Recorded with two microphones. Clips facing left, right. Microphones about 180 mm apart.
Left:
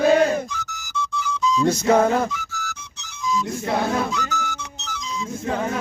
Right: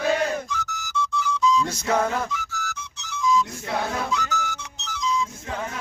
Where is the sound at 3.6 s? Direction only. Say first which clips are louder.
Left 4 dB; 40° left (ahead or behind).